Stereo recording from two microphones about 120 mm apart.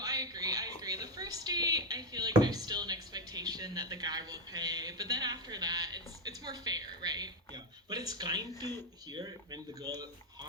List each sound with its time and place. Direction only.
0.0 s a sound: 30° right (ahead or behind)
0.8 s drawer open or close: 30° right (ahead or behind)
9.1 s speech: 30° right (ahead or behind)